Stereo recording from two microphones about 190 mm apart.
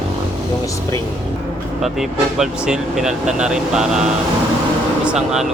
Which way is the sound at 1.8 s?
Centre (ahead or behind).